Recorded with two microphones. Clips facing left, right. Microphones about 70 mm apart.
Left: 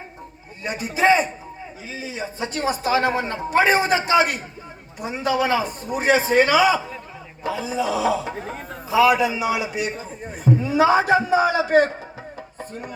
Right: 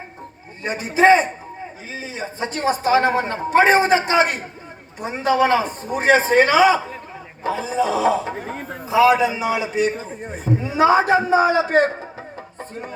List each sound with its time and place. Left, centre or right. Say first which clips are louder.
0.6 s a man's voice: right 4 dB; right
10.2 s a sound: left 3 dB; right
10.9 s a man's voice: right 2 dB; right